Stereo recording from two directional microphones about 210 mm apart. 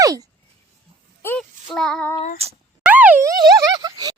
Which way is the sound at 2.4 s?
30° right (ahead or behind).